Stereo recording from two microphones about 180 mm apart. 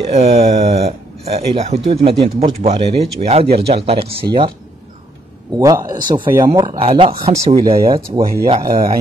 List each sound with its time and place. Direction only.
0.1 s speech: 35° right (ahead or behind)
5.6 s speech: 20° right (ahead or behind)